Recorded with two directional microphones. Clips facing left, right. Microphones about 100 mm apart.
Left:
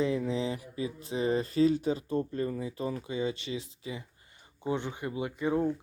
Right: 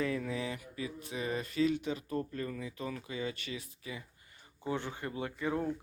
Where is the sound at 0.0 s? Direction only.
20° left (ahead or behind).